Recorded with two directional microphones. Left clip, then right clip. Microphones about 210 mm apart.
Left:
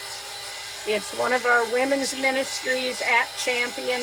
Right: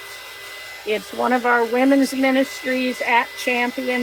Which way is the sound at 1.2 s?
40° right (ahead or behind).